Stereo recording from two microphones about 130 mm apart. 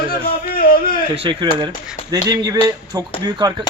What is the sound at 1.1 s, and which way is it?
A man's voice, 40° right (ahead or behind).